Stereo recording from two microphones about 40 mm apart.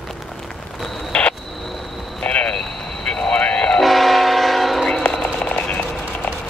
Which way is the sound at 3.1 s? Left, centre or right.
Centre.